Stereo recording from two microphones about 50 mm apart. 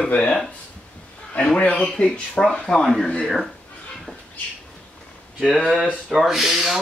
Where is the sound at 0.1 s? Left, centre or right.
Left.